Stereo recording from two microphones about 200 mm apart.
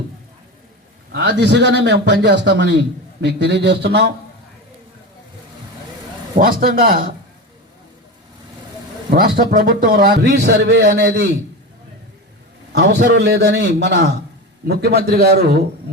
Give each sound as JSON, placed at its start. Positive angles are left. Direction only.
{"t": 1.1, "sound": "a man's voice", "side_deg": -60}
{"t": 6.4, "sound": "a man's voice", "side_deg": -45}
{"t": 9.0, "sound": "a man's voice", "side_deg": -45}
{"t": 12.7, "sound": "a man's voice", "side_deg": -60}